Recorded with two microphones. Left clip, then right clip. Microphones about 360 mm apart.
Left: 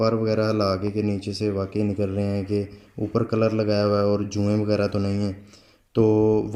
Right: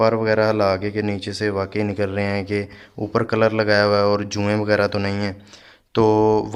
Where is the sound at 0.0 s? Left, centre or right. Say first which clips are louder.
Right 5 dB; right.